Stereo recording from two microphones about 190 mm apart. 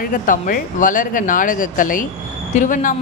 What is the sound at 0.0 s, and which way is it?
A woman's voice, 45° left (ahead or behind).